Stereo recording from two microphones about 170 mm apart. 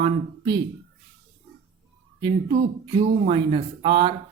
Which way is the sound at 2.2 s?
30° right (ahead or behind).